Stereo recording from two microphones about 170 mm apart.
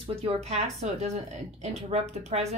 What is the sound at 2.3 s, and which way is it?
Speech, 40° right (ahead or behind).